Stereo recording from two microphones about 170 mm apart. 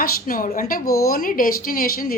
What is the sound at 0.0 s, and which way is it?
Speech, 55° left (ahead or behind).